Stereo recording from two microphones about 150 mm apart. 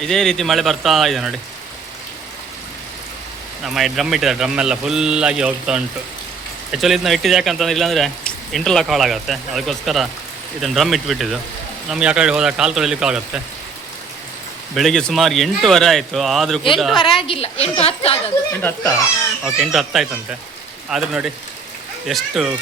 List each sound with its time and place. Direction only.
0.0 s speech: 5° left (ahead or behind)
3.7 s speech: centre (ahead or behind)
14.8 s speech: 5° left (ahead or behind)
17.0 s a woman's voice: 35° left (ahead or behind)
18.6 s a child's voice: 15° left (ahead or behind)
19.5 s speech: 5° right (ahead or behind)